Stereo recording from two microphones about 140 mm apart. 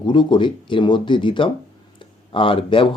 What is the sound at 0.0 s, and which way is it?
Speech, 35° left (ahead or behind).